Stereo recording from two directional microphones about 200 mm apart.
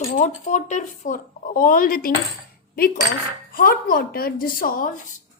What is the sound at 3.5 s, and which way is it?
A woman's voice, 45° left (ahead or behind).